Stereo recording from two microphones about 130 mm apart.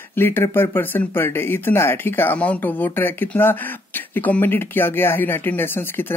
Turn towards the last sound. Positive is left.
turn(degrees=15)  # may be behind; listen again after turning